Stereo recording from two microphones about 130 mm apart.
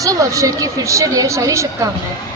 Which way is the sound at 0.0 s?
25° right (ahead or behind).